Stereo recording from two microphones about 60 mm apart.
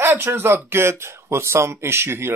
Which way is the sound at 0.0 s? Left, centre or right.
Right.